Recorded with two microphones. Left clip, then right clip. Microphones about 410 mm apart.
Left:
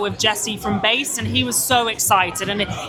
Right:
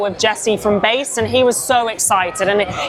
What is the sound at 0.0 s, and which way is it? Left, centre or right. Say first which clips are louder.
A woman's voice: right 4 dB; centre.